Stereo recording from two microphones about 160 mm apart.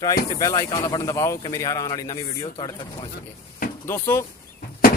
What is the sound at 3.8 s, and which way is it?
Speech, 15° left (ahead or behind).